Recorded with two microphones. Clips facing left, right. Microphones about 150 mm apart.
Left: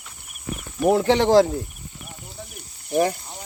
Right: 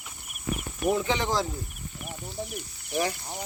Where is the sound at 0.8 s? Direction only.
70° left (ahead or behind).